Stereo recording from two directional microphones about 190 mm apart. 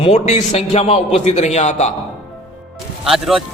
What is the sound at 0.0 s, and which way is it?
A man's voice, 35° left (ahead or behind).